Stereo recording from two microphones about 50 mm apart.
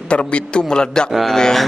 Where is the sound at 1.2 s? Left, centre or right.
Centre.